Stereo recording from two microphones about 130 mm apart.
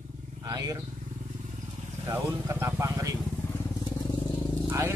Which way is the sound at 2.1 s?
20° right (ahead or behind).